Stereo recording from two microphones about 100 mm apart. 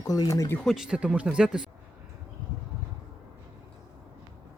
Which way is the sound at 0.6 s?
Centre (ahead or behind).